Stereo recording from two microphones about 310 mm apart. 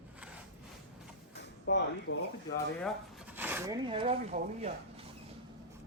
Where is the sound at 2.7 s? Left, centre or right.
Centre; by 4.7 s right.